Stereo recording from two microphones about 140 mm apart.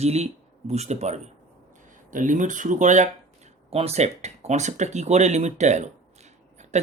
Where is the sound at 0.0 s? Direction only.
50° right (ahead or behind).